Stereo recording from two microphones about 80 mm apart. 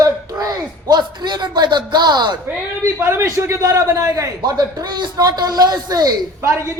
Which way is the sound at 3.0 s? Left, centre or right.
Right.